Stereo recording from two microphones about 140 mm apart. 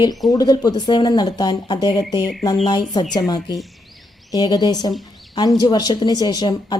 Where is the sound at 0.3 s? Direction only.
25° left (ahead or behind).